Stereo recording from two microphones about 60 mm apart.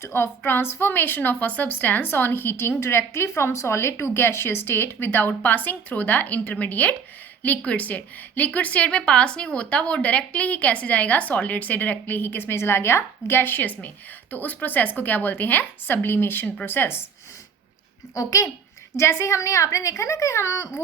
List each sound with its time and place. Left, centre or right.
0.0 s a woman's voice: left
18.1 s a woman's voice: left
18.9 s speech: left